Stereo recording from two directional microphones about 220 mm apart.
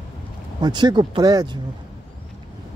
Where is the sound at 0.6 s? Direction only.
20° right (ahead or behind).